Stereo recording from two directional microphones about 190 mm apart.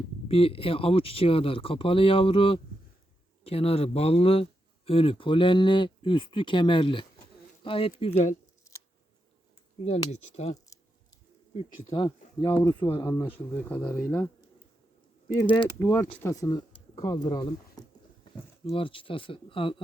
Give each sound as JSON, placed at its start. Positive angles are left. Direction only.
{"t": 0.3, "sound": "speech", "side_deg": 30}
{"t": 10.1, "sound": "speech", "side_deg": 35}
{"t": 11.9, "sound": "speech", "side_deg": 20}
{"t": 15.4, "sound": "speech", "side_deg": 25}